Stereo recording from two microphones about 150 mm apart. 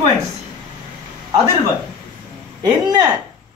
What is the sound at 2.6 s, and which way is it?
Speech, 25° right (ahead or behind).